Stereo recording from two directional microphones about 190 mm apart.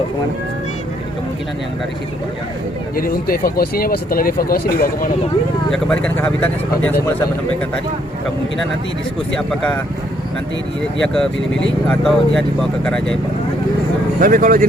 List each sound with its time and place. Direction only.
2.9 s speech: 50° left (ahead or behind)
5.7 s speech: 5° left (ahead or behind)
9.3 s speech: 5° left (ahead or behind)
11.0 s speech: 5° left (ahead or behind)
14.2 s speech: 45° right (ahead or behind)